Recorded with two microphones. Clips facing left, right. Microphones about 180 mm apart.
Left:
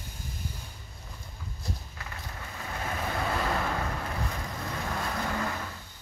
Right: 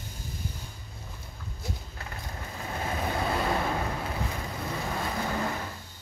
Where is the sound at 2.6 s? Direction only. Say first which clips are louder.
Right 2 dB; 20° right (ahead or behind).